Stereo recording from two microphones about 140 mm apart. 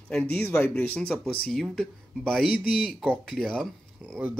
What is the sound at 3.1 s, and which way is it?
Speech, 5° left (ahead or behind).